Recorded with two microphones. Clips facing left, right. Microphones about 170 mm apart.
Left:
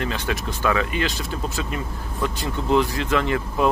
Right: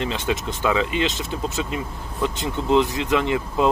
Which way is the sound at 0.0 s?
20° right (ahead or behind).